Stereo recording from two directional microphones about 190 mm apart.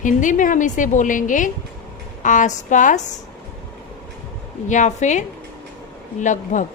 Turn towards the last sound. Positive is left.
turn(degrees=40)  # may be behind; listen again after turning